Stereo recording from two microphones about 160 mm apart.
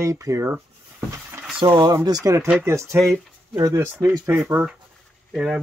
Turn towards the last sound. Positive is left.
turn(degrees=-5)  # may be behind; listen again after turning